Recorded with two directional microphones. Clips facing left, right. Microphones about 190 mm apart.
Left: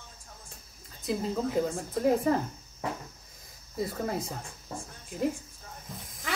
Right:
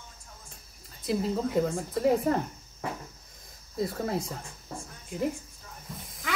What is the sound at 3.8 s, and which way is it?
Speech, centre (ahead or behind).